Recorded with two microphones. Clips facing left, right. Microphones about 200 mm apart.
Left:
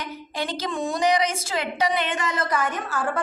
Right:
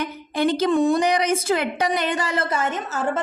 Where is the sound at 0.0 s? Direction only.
55° right (ahead or behind).